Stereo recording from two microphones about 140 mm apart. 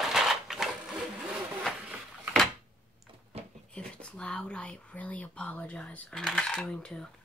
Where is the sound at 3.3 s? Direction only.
45° right (ahead or behind).